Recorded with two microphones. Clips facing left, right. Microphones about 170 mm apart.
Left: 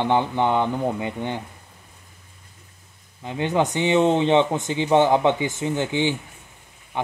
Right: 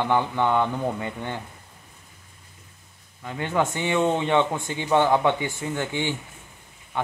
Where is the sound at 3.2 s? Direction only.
20° left (ahead or behind).